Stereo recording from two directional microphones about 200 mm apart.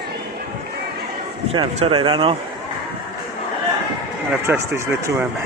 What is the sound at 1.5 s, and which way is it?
Speech, 30° right (ahead or behind).